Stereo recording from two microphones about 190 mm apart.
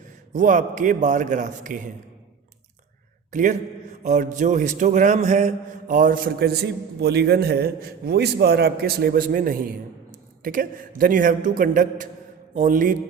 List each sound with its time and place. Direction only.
0.3 s a man's voice: 40° right (ahead or behind)
3.3 s a man's voice: 40° right (ahead or behind)